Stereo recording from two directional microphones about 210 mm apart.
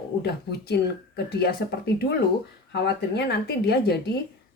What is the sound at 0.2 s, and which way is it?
Speech, 50° left (ahead or behind).